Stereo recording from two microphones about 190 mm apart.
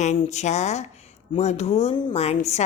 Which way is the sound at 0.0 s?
35° left (ahead or behind).